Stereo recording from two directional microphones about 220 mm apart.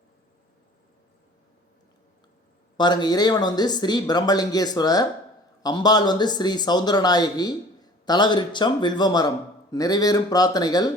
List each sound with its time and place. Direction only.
2.7 s speech: 20° left (ahead or behind)